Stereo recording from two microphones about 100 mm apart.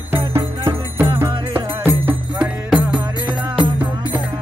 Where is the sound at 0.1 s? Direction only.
20° right (ahead or behind).